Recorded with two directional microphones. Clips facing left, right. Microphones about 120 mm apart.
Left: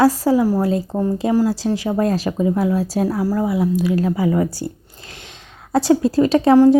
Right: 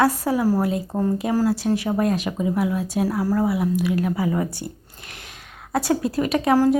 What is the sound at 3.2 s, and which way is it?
A woman's voice, 20° left (ahead or behind).